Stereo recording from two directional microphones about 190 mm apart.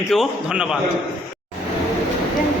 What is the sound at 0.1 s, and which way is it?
Speech, 5° right (ahead or behind).